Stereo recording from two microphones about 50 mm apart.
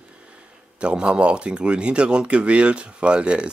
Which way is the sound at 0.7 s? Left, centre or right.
Right.